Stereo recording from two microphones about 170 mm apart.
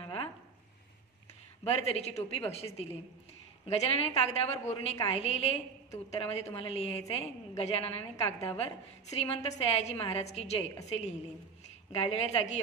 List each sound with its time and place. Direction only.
1.6 s a woman's voice: 35° left (ahead or behind)